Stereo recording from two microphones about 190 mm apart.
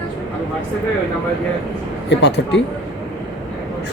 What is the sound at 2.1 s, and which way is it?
Speech, 70° left (ahead or behind).